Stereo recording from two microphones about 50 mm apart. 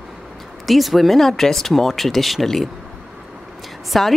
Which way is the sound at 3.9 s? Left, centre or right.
Centre.